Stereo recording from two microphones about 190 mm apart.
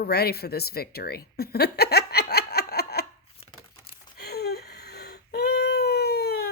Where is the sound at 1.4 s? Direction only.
55° left (ahead or behind).